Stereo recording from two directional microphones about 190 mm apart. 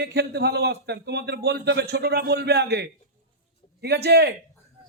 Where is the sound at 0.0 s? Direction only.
60° right (ahead or behind).